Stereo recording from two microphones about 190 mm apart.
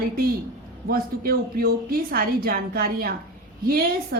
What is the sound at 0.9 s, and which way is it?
Speech, 50° right (ahead or behind).